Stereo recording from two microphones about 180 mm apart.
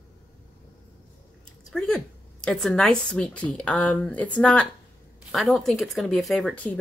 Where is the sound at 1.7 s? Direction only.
5° left (ahead or behind).